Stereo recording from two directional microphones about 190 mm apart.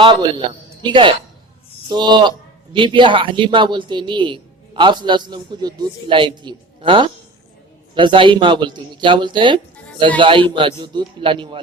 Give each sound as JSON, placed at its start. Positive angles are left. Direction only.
{"t": 0.0, "sound": "a man's voice", "side_deg": -25}